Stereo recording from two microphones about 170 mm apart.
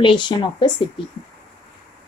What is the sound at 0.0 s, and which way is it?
Speech, 30° left (ahead or behind).